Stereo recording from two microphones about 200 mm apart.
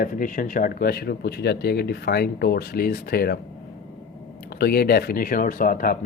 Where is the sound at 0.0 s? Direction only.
45° left (ahead or behind).